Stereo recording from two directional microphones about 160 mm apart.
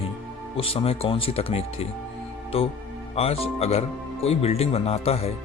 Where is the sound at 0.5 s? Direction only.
35° left (ahead or behind).